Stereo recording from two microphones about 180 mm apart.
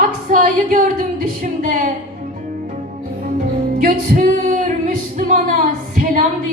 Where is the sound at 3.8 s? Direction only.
50° right (ahead or behind).